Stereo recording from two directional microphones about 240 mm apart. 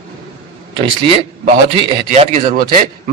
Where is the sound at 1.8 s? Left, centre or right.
Right.